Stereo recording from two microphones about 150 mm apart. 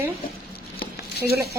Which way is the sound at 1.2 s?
90° left.